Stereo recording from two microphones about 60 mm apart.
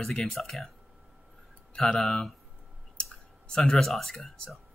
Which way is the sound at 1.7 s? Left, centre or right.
Centre.